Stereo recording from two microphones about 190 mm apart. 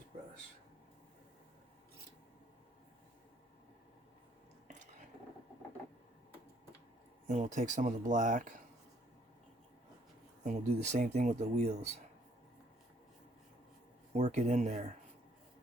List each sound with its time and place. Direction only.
4.7 s a sound: 40° right (ahead or behind)
7.3 s speech: 40° right (ahead or behind)
10.4 s speech: 40° right (ahead or behind)
14.1 s speech: 35° right (ahead or behind)